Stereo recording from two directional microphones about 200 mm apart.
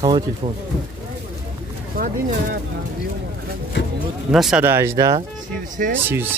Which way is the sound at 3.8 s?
60° left (ahead or behind).